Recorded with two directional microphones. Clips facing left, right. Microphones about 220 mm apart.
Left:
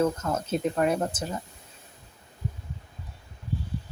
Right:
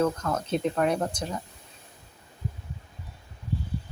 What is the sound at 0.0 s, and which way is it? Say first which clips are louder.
Speech: even; 10° left (ahead or behind).